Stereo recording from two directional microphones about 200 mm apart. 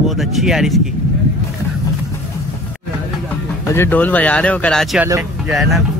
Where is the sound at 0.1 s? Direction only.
Centre (ahead or behind).